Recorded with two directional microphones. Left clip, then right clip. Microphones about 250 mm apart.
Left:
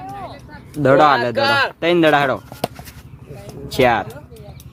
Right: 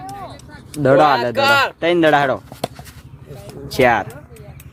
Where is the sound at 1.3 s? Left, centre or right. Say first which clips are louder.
Right 2 dB; right.